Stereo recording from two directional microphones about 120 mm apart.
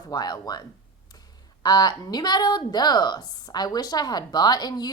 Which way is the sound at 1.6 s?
35° left (ahead or behind).